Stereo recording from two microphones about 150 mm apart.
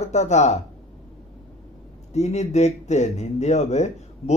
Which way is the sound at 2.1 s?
50° left (ahead or behind).